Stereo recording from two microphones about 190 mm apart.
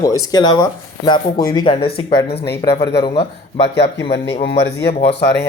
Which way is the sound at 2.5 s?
60° left (ahead or behind).